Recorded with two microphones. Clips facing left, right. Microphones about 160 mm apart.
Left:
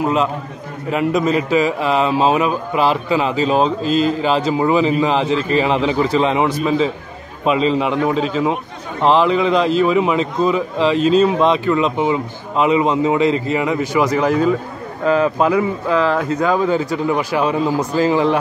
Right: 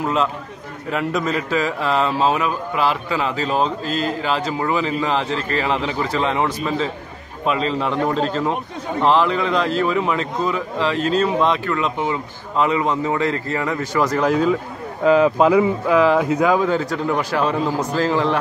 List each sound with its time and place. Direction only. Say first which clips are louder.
0.0 s a man's voice: left 3 dB; 5° left (ahead or behind)
9.0 s a man's voice: left 4 dB; 20° left (ahead or behind)
14.2 s speech: left 2 dB; centre (ahead or behind)
15.0 s speech: right 1 dB; 10° right (ahead or behind); by 18.4 s 10° left (ahead or behind)